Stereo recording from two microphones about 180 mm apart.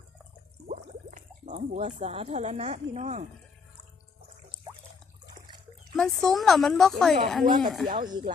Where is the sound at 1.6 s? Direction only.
35° right (ahead or behind).